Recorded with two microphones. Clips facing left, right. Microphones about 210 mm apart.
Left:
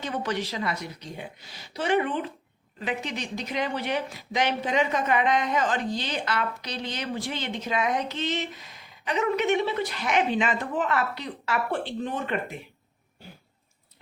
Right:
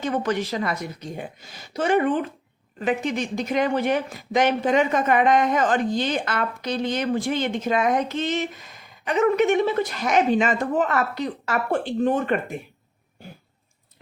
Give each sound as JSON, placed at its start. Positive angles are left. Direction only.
{"t": 0.0, "sound": "speech", "side_deg": -50}